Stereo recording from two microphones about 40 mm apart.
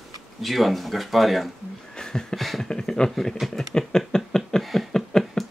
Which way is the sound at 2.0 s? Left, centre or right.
Centre.